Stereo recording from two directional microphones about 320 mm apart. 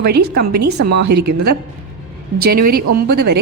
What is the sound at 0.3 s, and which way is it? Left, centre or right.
A woman's voice, right.